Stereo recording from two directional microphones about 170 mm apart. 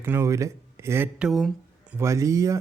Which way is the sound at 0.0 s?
15° right (ahead or behind).